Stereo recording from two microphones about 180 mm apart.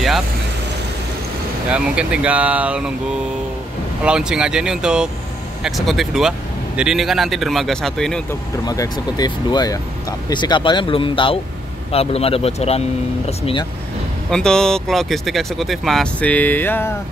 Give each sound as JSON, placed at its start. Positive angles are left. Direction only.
{"t": 1.7, "sound": "speech", "side_deg": -5}
{"t": 4.0, "sound": "speech", "side_deg": -5}
{"t": 8.3, "sound": "speech", "side_deg": 20}
{"t": 14.3, "sound": "speech", "side_deg": 5}